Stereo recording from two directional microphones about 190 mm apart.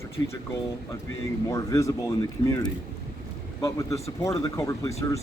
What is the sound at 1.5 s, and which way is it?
Speech, 15° left (ahead or behind).